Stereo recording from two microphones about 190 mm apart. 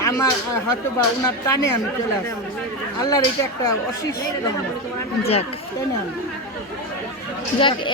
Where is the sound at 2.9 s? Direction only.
20° left (ahead or behind).